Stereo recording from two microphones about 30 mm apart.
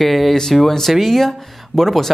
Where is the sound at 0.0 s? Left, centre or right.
Centre.